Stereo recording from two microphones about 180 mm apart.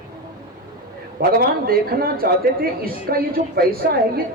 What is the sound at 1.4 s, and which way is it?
A woman's voice, 55° right (ahead or behind).